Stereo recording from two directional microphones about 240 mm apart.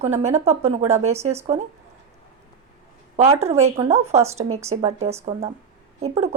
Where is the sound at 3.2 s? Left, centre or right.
Right.